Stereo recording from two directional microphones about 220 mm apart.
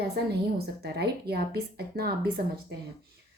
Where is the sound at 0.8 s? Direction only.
50° right (ahead or behind).